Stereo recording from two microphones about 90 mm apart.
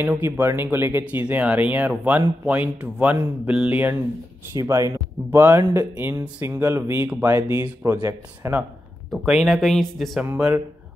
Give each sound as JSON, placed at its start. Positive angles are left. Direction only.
{"t": 0.1, "sound": "speech", "side_deg": -25}
{"t": 4.6, "sound": "speech", "side_deg": -35}
{"t": 9.2, "sound": "speech", "side_deg": 0}